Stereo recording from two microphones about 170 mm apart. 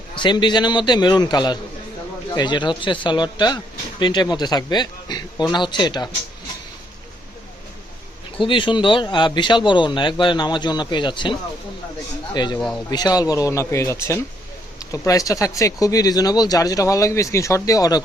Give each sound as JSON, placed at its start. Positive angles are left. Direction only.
{"t": 0.2, "sound": "speech", "side_deg": 25}
{"t": 8.4, "sound": "speech", "side_deg": 30}